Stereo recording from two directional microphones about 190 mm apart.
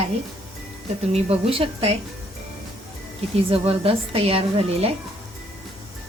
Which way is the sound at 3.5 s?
30° right (ahead or behind).